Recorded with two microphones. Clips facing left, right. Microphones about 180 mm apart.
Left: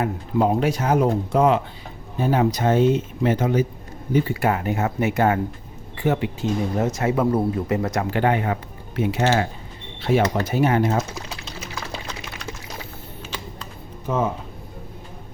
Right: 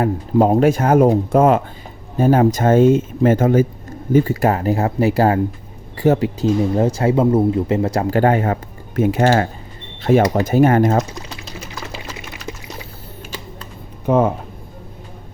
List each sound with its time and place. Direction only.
0.0 s speech: 40° right (ahead or behind)
11.9 s sewing machine: 5° right (ahead or behind)
14.1 s speech: 55° right (ahead or behind)